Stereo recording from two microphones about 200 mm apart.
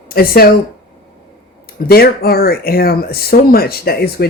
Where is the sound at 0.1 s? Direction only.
50° left (ahead or behind).